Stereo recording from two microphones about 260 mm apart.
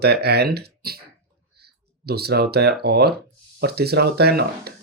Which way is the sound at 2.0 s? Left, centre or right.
Right.